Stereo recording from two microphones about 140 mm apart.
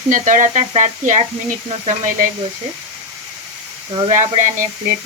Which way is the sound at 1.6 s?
45° right (ahead or behind).